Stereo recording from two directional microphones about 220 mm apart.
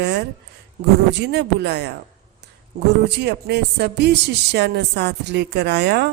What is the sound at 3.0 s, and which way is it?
Speech, 50° right (ahead or behind).